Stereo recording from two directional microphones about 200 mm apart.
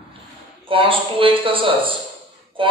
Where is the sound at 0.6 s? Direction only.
25° right (ahead or behind).